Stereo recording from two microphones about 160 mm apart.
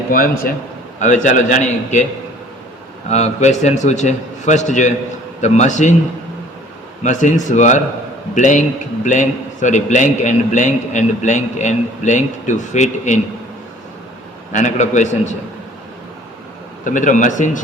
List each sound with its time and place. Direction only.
0.1 s a man's voice: 65° left (ahead or behind)
0.9 s a man's voice: 50° left (ahead or behind)
3.1 s a man's voice: 45° left (ahead or behind)
7.0 s a man's voice: 50° left (ahead or behind)
14.5 s a man's voice: 50° left (ahead or behind)
16.8 s a man's voice: 55° left (ahead or behind)